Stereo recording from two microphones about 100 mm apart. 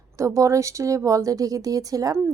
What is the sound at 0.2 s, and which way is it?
Speech, 30° right (ahead or behind).